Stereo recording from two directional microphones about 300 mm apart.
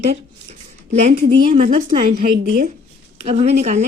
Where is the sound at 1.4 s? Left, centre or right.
Centre.